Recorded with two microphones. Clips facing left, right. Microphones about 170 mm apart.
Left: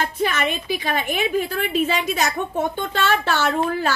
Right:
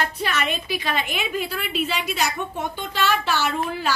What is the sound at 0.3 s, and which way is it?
A woman's voice, 50° left (ahead or behind).